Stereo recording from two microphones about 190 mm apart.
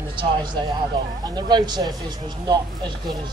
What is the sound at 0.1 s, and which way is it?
Speech, 25° right (ahead or behind).